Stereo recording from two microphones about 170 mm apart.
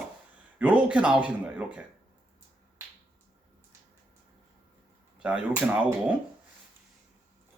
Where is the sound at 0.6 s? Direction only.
5° right (ahead or behind).